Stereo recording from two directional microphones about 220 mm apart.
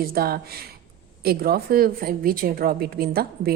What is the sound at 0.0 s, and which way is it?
Speech, 45° right (ahead or behind).